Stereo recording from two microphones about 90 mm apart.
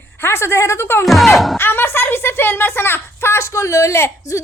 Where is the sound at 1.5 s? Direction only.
25° left (ahead or behind).